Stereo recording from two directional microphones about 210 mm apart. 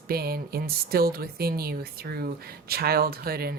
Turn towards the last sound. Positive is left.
turn(degrees=-45)  # may be behind; listen again after turning